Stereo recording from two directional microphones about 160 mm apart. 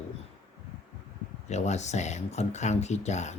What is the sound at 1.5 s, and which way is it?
Speech, 45° left (ahead or behind).